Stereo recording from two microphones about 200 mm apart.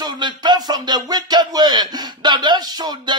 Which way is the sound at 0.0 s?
20° right (ahead or behind).